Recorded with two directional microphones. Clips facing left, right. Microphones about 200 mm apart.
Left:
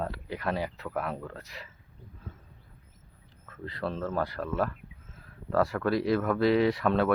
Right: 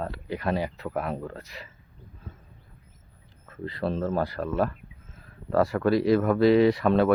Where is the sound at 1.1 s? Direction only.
25° right (ahead or behind).